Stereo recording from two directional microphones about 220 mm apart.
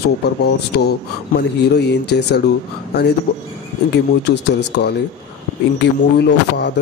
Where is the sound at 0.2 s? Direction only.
50° left (ahead or behind).